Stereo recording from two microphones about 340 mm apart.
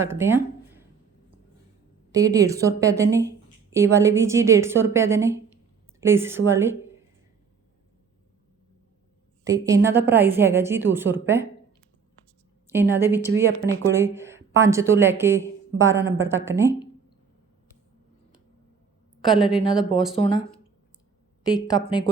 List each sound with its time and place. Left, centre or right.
0.0 s speech: centre
2.1 s a woman's voice: centre
9.5 s a woman's voice: centre
12.6 s a woman's voice: centre
19.2 s a woman's voice: centre
20.1 s speech: centre